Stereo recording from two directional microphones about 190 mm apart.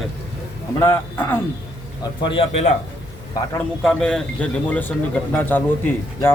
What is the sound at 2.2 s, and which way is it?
Speech, 25° left (ahead or behind).